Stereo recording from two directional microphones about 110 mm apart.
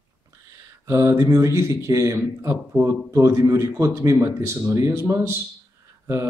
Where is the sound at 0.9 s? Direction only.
30° right (ahead or behind).